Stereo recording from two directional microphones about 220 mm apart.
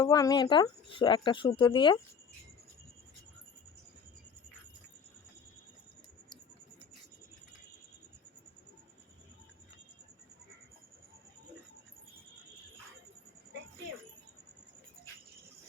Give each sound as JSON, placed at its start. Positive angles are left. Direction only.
{"t": 0.0, "sound": "speech", "side_deg": 15}